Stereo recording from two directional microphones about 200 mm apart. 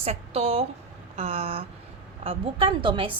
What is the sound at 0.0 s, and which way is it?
A woman's voice, 30° right (ahead or behind).